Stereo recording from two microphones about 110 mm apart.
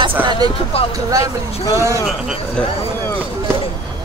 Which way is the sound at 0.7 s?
60° left (ahead or behind).